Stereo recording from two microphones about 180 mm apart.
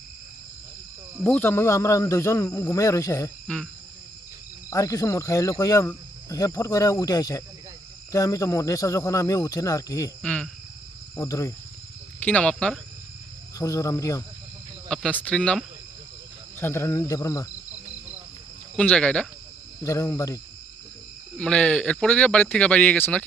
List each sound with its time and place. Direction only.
1.2 s speech: 10° left (ahead or behind)
3.4 s speech: 5° left (ahead or behind)
4.7 s speech: 20° left (ahead or behind)
10.2 s speech: 5° left (ahead or behind)
11.2 s speech: 15° left (ahead or behind)
12.2 s speech: 5° left (ahead or behind)
13.6 s speech: 20° left (ahead or behind)
14.8 s speech: centre (ahead or behind); by 17.5 s 20° left (ahead or behind)
18.8 s speech: 5° left (ahead or behind)
19.8 s speech: 15° left (ahead or behind)
21.3 s speech: 5° left (ahead or behind)